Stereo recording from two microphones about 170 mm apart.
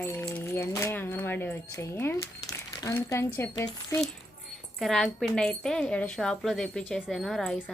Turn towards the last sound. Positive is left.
turn(degrees=0)  # may be behind; listen again after turning